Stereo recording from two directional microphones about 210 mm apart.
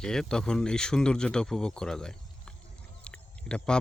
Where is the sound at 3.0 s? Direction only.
5° left (ahead or behind).